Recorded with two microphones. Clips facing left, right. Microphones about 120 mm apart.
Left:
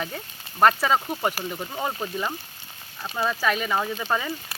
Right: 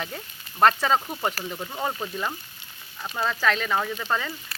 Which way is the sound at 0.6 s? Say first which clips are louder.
Left 1 dB; 5° left (ahead or behind).